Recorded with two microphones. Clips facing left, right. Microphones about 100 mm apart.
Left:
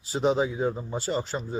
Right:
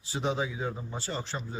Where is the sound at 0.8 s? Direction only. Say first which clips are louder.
Left 7 dB; 35° left (ahead or behind).